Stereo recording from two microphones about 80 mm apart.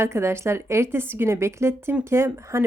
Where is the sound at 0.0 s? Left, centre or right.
Right.